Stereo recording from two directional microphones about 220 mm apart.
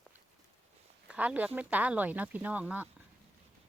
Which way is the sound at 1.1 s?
5° right (ahead or behind).